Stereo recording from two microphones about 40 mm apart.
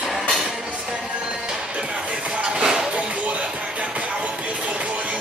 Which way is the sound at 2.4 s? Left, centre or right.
Right.